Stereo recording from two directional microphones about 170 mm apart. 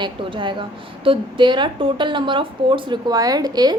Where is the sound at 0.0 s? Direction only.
30° right (ahead or behind).